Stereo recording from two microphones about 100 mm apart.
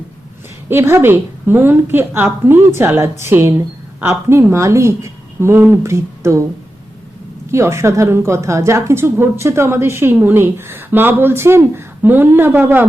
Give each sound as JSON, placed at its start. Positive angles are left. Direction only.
{"t": 0.7, "sound": "a woman's voice", "side_deg": -25}
{"t": 7.5, "sound": "a woman's voice", "side_deg": -30}